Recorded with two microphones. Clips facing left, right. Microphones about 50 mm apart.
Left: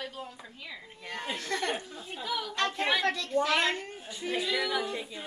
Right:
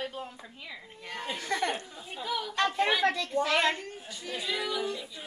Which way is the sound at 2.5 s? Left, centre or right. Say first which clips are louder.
Right 3 dB; centre.